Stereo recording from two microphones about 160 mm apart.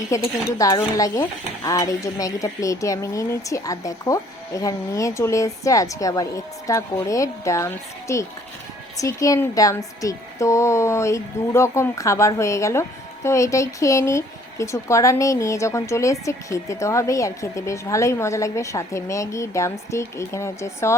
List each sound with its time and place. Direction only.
0.1 s stir: 20° left (ahead or behind)